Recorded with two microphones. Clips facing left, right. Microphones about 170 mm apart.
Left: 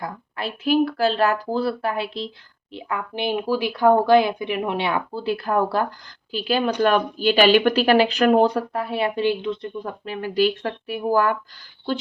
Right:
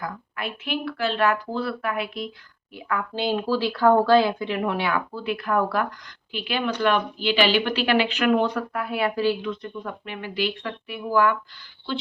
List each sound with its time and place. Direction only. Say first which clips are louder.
0.0 s speech: left 2 dB; 30° left (ahead or behind)